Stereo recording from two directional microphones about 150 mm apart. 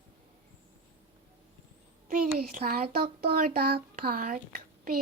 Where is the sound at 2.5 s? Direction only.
75° right (ahead or behind).